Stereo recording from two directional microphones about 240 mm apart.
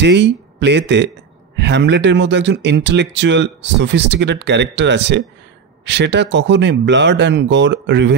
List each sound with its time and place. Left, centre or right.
0.0 s speech: right